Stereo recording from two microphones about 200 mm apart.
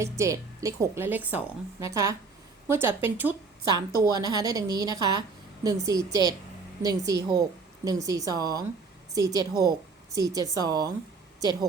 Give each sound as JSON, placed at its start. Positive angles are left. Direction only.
{"t": 0.0, "sound": "a woman's voice", "side_deg": -15}